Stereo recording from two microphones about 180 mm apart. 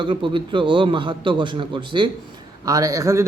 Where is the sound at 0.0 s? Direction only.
30° right (ahead or behind).